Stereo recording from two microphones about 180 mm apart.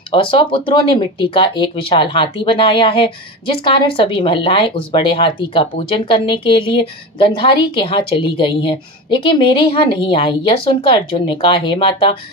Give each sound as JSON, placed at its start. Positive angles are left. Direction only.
{"t": 0.1, "sound": "speech", "side_deg": 30}